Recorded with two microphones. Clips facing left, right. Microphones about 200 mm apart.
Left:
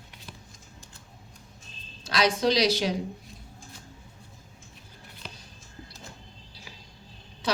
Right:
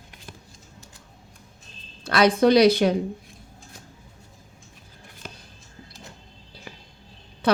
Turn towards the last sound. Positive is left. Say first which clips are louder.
# right 7 dB
turn(degrees=-55)  # may be behind; listen again after turning